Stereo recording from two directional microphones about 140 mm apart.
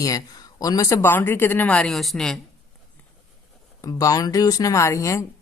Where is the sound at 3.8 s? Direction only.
25° left (ahead or behind).